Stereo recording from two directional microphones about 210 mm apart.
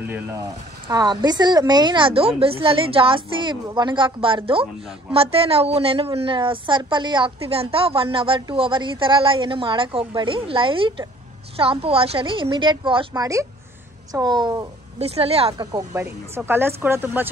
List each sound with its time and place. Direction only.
0.0 s a woman's voice: 10° right (ahead or behind)
15.0 s a woman's voice: 30° right (ahead or behind)
15.6 s speech: 15° right (ahead or behind)